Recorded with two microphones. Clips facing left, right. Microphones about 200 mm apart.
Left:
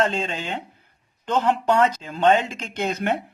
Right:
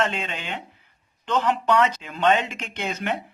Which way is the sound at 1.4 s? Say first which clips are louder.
Left 2 dB; 45° left (ahead or behind).